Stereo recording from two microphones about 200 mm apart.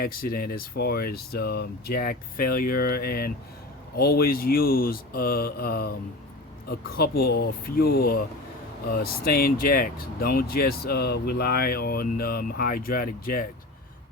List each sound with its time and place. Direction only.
0.0 s speech: 45° left (ahead or behind)